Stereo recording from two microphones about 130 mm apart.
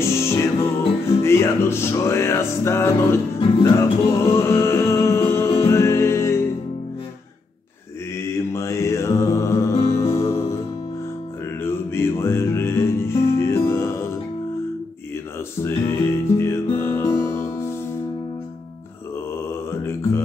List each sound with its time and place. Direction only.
0.0 s music: 20° left (ahead or behind)
8.5 s music: 25° left (ahead or behind)
11.6 s music: 20° left (ahead or behind)
15.6 s music: 20° left (ahead or behind)
19.7 s mantra: 20° left (ahead or behind)